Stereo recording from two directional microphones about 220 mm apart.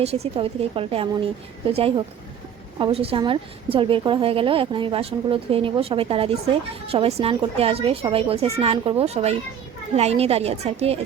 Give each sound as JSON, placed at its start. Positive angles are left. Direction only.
{"t": 0.0, "sound": "a woman's voice", "side_deg": -30}
{"t": 2.7, "sound": "a woman's voice", "side_deg": -25}